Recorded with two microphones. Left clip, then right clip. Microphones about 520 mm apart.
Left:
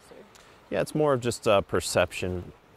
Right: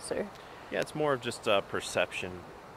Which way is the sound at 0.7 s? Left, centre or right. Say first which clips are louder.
Left 5 dB; left.